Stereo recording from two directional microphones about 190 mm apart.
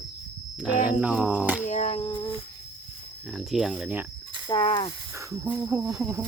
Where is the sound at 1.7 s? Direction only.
35° left (ahead or behind).